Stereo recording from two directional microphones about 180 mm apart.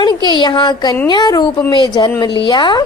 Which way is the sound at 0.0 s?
25° left (ahead or behind).